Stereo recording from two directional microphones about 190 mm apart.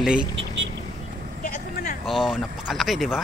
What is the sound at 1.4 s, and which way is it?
Vehicle, 40° left (ahead or behind).